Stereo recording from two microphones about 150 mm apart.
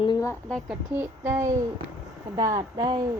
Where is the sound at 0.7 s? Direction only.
15° right (ahead or behind).